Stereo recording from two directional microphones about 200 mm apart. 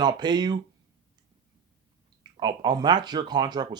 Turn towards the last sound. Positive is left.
turn(degrees=-20)  # may be behind; listen again after turning